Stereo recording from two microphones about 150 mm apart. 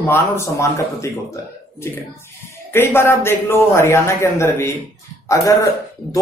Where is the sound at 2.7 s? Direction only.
15° left (ahead or behind).